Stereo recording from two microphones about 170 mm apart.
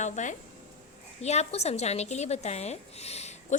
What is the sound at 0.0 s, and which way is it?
A woman's voice, 45° left (ahead or behind).